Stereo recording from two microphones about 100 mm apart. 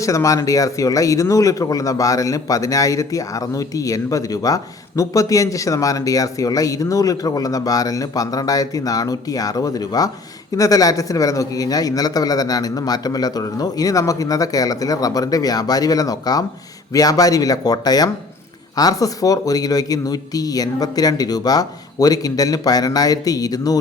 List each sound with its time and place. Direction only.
0.0 s speech: 30° left (ahead or behind)